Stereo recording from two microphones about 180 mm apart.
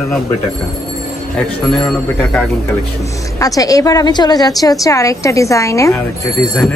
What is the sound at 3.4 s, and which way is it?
A woman's voice, 20° left (ahead or behind).